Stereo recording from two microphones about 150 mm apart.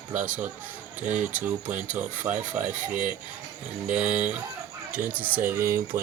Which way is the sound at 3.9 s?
55° right (ahead or behind).